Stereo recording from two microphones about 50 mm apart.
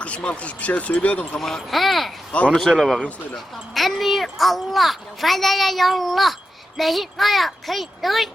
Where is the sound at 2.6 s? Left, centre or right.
Centre.